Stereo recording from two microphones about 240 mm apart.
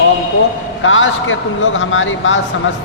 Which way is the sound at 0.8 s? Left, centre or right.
Left.